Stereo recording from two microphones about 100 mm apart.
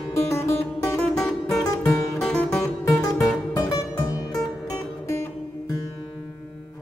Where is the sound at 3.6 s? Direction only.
35° left (ahead or behind).